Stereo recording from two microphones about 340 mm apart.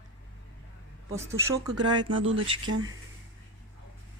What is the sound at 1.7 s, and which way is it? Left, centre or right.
Speech, right.